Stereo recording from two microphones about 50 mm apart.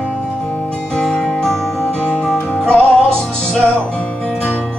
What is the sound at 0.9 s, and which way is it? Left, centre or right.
Music, centre.